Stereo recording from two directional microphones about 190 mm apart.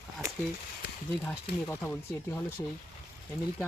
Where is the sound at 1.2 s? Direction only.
10° left (ahead or behind).